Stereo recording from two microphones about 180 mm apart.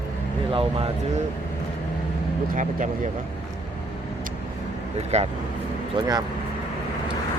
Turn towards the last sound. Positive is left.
turn(degrees=-20)  # may be behind; listen again after turning